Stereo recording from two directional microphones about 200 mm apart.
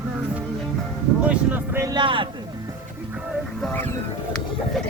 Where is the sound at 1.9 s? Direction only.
25° right (ahead or behind).